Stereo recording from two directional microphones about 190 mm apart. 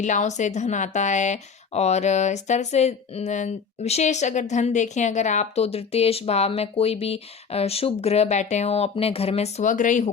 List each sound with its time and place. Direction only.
0.0 s speech: 40° left (ahead or behind)